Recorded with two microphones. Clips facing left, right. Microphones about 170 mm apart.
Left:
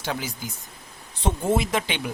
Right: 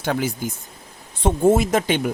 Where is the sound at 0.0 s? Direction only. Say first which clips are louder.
Right 7 dB; 50° right (ahead or behind).